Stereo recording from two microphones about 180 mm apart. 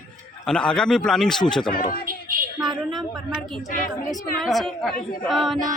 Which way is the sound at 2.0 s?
50° right (ahead or behind).